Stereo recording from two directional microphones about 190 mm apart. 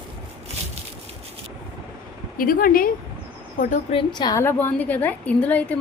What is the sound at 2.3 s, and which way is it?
Speech, 50° left (ahead or behind).